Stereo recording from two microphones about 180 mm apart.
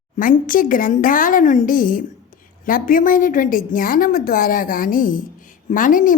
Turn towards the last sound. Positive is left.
turn(degrees=50)  # may be behind; listen again after turning